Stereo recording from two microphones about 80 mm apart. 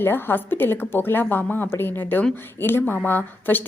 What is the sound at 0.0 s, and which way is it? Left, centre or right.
A woman's voice, left.